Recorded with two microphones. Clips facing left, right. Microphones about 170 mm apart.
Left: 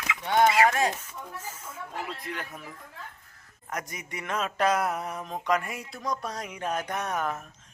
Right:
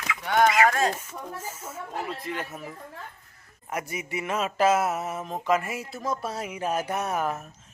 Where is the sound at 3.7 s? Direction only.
10° right (ahead or behind).